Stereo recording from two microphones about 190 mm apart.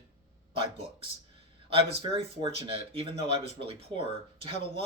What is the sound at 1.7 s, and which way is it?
Speech, 30° right (ahead or behind).